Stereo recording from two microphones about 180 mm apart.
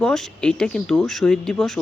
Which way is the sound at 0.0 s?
5° left (ahead or behind).